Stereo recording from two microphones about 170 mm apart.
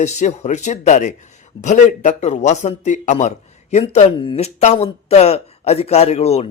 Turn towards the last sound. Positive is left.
turn(degrees=35)  # may be behind; listen again after turning